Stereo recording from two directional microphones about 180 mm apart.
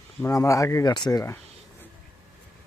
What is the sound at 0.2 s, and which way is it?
Speech, 20° left (ahead or behind).